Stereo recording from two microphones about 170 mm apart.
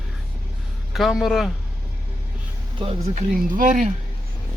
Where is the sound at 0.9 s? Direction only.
Centre (ahead or behind).